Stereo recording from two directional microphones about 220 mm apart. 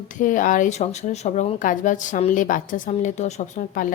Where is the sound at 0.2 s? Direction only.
35° left (ahead or behind).